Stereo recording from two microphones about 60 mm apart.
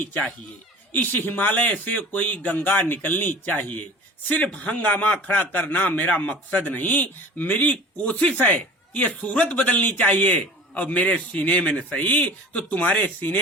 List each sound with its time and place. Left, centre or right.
0.0 s speech: left